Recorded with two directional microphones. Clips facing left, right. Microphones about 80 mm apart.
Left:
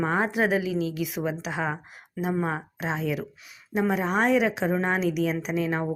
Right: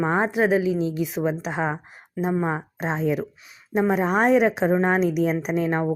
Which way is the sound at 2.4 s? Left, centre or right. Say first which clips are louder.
Right 3 dB; right.